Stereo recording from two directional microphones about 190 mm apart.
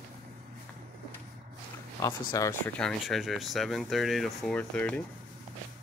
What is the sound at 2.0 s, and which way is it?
Speech, 20° left (ahead or behind).